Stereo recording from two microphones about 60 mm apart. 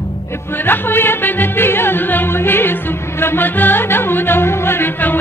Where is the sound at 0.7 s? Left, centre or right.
Left.